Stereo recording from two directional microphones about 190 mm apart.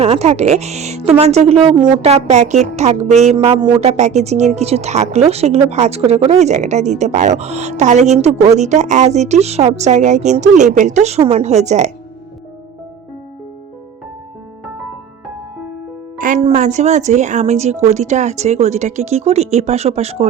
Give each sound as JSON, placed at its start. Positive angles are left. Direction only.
{"t": 0.0, "sound": "a woman's voice", "side_deg": -35}
{"t": 16.1, "sound": "music", "side_deg": -45}
{"t": 16.4, "sound": "a woman's voice", "side_deg": -40}